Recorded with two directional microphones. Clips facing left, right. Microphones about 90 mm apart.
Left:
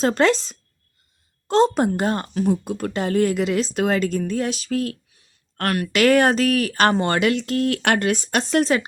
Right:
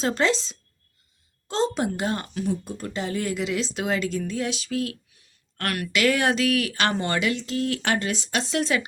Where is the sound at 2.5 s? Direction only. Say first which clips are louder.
Left 6 dB; 60° left (ahead or behind); by 5.9 s 40° left (ahead or behind).